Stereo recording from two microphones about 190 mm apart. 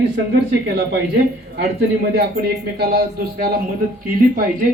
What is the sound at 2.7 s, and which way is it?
Speech, 55° right (ahead or behind).